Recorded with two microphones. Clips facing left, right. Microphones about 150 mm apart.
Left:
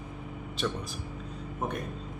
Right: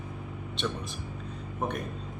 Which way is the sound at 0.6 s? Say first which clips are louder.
Left 1 dB; centre (ahead or behind).